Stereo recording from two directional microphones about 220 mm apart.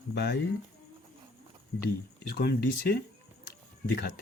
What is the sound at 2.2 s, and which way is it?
Speech, 45° left (ahead or behind).